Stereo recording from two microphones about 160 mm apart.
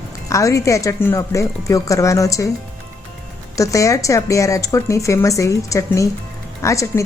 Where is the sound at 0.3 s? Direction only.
20° left (ahead or behind).